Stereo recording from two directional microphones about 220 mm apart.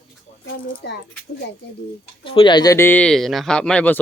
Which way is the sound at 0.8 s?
45° left (ahead or behind).